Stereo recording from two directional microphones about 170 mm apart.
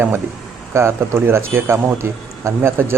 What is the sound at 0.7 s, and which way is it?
A man's voice, 15° right (ahead or behind).